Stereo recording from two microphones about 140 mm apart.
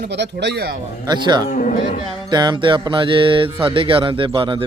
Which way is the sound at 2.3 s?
30° right (ahead or behind).